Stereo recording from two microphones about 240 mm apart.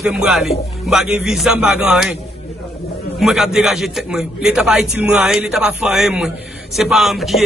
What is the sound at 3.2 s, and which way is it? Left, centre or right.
A man's voice, centre.